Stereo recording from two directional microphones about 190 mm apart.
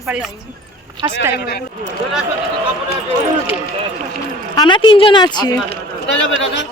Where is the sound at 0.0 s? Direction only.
Centre (ahead or behind).